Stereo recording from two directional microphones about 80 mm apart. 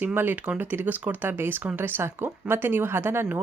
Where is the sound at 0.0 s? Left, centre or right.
Right.